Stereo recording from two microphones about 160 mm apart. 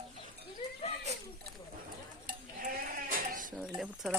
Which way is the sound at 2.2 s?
60° right (ahead or behind).